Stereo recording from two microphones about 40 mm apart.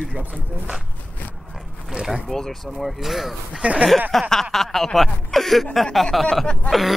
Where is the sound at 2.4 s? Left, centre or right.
Centre.